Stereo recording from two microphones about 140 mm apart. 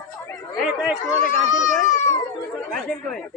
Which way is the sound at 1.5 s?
65° left (ahead or behind).